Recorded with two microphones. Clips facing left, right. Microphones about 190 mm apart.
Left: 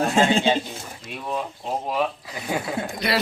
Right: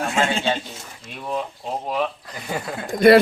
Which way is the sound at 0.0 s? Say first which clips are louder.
Left 3 dB; 35° left (ahead or behind).